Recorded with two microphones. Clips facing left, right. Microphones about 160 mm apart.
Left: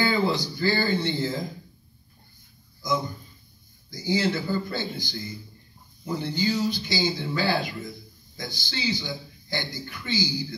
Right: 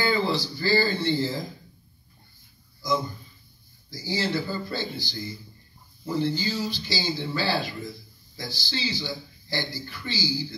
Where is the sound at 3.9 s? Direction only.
20° left (ahead or behind).